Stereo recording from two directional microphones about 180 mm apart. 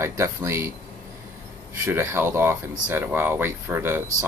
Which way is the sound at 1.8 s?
15° right (ahead or behind).